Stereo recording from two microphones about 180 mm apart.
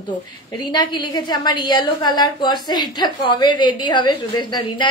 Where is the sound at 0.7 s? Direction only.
25° left (ahead or behind).